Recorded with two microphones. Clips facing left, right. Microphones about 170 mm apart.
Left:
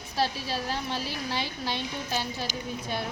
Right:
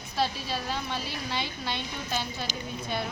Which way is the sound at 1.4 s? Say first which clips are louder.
Left 1 dB; 35° left (ahead or behind).